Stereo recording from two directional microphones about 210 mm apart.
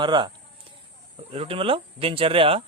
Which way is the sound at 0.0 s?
20° right (ahead or behind).